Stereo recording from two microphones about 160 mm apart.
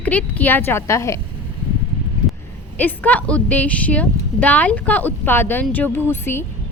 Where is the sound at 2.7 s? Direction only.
10° left (ahead or behind).